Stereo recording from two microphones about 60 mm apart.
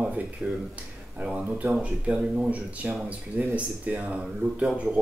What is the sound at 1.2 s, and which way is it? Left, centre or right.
Speech, right.